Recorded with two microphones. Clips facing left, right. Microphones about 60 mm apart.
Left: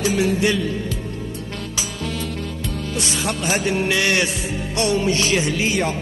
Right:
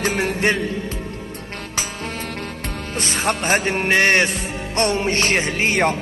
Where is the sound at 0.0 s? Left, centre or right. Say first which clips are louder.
Left 1 dB; right.